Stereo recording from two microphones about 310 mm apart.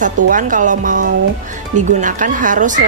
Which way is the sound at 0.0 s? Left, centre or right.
Right.